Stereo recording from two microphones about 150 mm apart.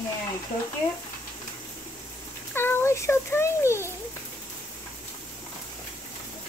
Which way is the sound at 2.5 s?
15° left (ahead or behind).